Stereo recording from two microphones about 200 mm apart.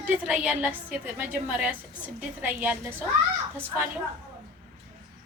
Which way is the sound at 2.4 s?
10° right (ahead or behind).